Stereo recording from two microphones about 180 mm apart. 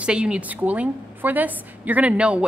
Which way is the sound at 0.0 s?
5° right (ahead or behind).